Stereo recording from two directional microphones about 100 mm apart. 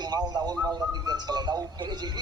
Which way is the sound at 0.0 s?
45° right (ahead or behind).